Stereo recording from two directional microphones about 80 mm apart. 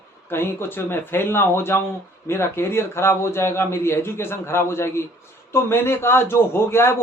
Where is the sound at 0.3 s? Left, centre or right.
Left.